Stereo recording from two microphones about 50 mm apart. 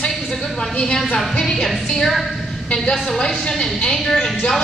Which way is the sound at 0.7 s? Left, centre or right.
Centre.